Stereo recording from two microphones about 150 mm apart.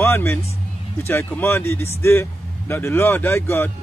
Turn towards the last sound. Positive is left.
turn(degrees=15)  # may be behind; listen again after turning